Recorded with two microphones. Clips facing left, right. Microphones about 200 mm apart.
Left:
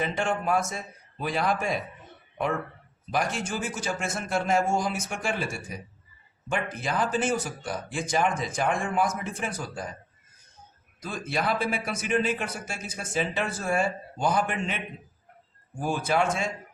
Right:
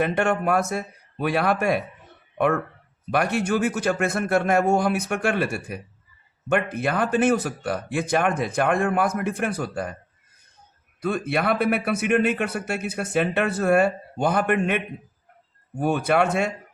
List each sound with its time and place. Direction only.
0.0 s speech: 65° right (ahead or behind)
3.1 s speech: 60° right (ahead or behind)
11.0 s speech: 60° right (ahead or behind)